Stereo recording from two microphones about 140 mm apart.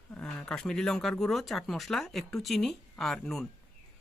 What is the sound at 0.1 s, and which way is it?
Speech, 5° left (ahead or behind).